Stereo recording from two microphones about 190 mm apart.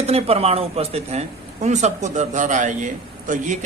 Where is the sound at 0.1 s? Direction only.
30° right (ahead or behind).